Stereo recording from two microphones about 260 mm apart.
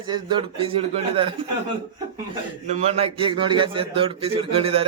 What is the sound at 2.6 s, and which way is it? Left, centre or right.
A man's voice, right.